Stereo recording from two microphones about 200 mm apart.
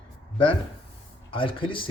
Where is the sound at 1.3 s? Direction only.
25° left (ahead or behind).